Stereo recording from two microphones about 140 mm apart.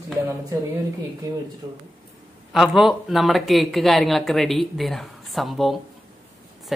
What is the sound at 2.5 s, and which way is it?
A woman's voice, centre (ahead or behind).